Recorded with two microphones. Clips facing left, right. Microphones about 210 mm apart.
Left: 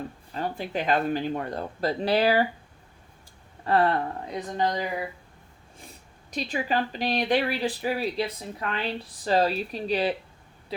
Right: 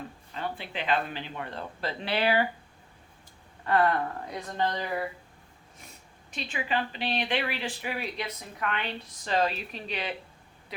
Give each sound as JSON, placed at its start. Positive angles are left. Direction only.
{"t": 0.3, "sound": "speech", "side_deg": 40}
{"t": 3.7, "sound": "speech", "side_deg": 35}
{"t": 4.3, "sound": "speech", "side_deg": 20}
{"t": 6.3, "sound": "speech", "side_deg": 40}